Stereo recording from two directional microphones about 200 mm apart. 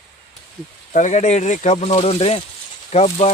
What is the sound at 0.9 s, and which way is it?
Speech, 40° left (ahead or behind).